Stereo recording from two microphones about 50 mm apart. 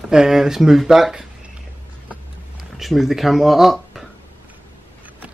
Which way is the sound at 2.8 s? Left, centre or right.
Centre.